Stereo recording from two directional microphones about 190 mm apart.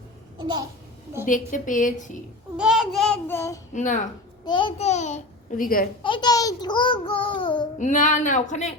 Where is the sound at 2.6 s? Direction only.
5° right (ahead or behind); by 3.6 s 15° left (ahead or behind).